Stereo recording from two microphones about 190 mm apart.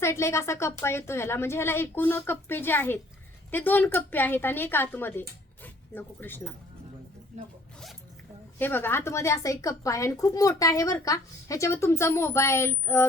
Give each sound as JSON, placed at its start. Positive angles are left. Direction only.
{"t": 0.0, "sound": "a woman's voice", "side_deg": 15}
{"t": 7.3, "sound": "speech", "side_deg": -40}
{"t": 8.5, "sound": "a woman's voice", "side_deg": 10}